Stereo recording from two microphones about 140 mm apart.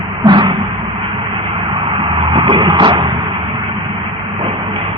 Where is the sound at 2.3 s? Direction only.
35° right (ahead or behind).